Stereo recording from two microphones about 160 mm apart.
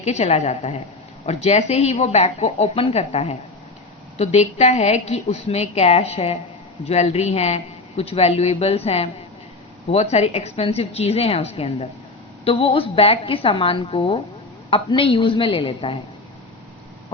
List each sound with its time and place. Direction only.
0.0 s a woman's voice: 40° left (ahead or behind)